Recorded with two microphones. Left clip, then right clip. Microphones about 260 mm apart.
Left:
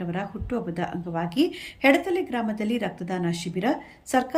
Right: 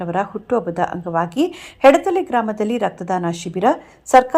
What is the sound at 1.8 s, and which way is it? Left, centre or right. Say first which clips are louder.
A woman's voice: right 9 dB; right.